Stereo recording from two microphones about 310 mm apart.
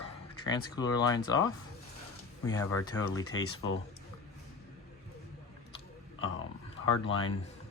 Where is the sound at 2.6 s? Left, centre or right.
Centre.